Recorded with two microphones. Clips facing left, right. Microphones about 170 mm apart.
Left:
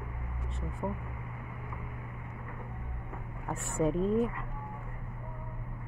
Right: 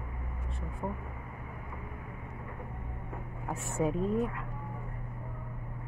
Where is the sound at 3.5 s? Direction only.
Centre (ahead or behind).